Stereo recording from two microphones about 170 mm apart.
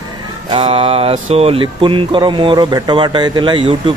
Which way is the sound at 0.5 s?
30° right (ahead or behind).